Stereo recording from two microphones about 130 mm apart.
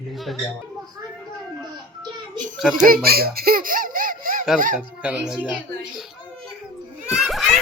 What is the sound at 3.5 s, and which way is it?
Laughter, 90° right.